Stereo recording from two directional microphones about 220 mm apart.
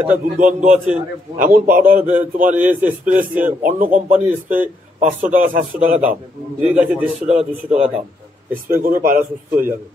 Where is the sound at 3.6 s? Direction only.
40° right (ahead or behind).